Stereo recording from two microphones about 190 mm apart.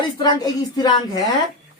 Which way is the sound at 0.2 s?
20° left (ahead or behind).